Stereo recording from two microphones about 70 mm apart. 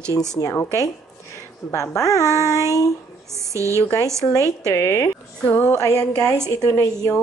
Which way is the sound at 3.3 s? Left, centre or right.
Right.